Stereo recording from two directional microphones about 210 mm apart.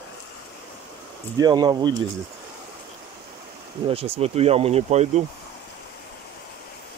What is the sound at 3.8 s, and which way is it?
Speech, 30° right (ahead or behind).